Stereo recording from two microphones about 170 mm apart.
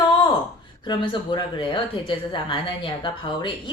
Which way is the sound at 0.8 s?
30° left (ahead or behind).